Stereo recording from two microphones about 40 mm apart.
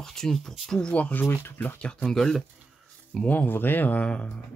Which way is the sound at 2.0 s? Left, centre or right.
Centre.